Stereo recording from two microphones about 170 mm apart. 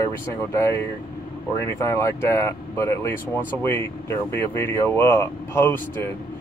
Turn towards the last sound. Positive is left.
turn(degrees=15)  # may be behind; listen again after turning